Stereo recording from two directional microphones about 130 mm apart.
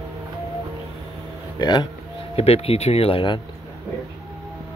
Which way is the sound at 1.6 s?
35° left (ahead or behind).